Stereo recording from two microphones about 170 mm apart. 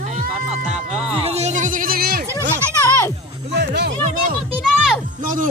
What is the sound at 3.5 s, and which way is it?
Music, 85° right.